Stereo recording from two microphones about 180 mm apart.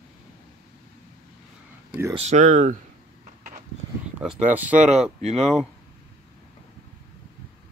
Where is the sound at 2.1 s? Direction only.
40° right (ahead or behind).